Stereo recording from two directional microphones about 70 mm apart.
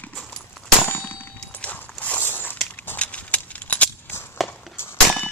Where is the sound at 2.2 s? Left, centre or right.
Left.